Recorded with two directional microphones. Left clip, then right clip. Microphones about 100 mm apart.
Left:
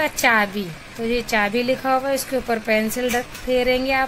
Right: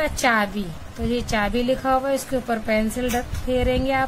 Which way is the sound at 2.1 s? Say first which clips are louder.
Left 2 dB; 25° left (ahead or behind).